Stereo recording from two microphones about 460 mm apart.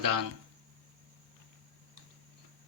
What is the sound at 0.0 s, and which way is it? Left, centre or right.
Speech, right.